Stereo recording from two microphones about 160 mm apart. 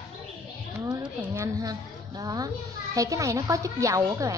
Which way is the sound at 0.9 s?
20° right (ahead or behind).